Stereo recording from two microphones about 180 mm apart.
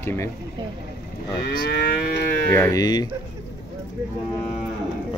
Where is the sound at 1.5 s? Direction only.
60° left (ahead or behind).